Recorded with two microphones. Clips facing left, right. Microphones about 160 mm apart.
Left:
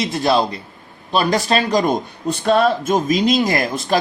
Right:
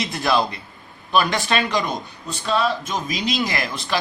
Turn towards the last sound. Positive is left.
turn(degrees=45)  # may be behind; listen again after turning